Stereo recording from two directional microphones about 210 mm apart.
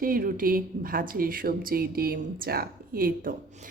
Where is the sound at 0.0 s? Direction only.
45° right (ahead or behind).